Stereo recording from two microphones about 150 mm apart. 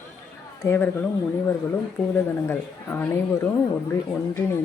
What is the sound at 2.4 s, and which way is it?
A woman's voice, 15° left (ahead or behind).